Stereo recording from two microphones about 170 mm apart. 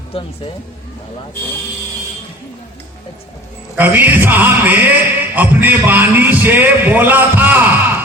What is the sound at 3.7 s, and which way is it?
A man's voice, 10° right (ahead or behind).